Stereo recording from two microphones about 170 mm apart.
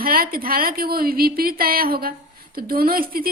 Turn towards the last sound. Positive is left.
turn(degrees=-60)  # may be behind; listen again after turning